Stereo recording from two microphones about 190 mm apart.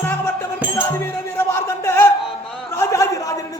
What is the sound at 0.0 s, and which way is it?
Music, 10° left (ahead or behind).